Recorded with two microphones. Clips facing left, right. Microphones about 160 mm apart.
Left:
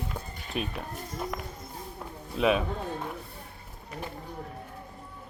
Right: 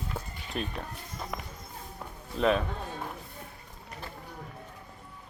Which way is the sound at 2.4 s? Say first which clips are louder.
Left 1 dB; 5° left (ahead or behind).